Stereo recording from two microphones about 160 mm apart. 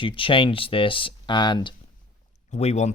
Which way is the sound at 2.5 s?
40° left (ahead or behind).